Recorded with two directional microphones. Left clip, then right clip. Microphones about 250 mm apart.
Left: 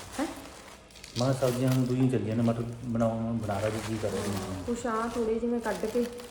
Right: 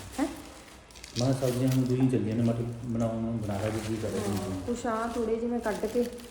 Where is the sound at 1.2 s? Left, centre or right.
Left.